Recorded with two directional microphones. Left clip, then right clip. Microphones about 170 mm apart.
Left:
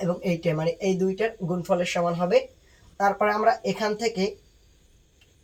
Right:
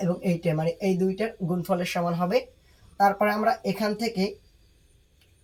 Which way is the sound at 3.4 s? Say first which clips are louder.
Left 2 dB; 15° left (ahead or behind).